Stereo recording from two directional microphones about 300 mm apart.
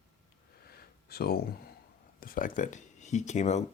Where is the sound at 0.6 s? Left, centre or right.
Left.